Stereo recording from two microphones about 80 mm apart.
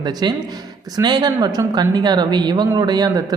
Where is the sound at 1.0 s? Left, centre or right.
Right.